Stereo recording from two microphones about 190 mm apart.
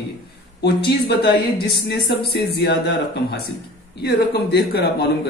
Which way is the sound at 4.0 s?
60° left (ahead or behind).